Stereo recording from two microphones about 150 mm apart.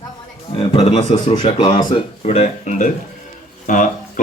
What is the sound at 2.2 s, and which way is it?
Speech, 50° left (ahead or behind).